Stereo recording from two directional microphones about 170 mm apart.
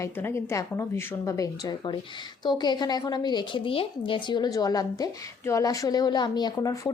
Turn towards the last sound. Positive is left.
turn(degrees=20)  # may be behind; listen again after turning